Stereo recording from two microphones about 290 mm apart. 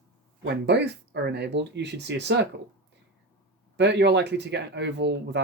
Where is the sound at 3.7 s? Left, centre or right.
Right.